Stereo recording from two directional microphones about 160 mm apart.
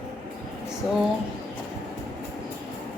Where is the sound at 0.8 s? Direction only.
Centre (ahead or behind).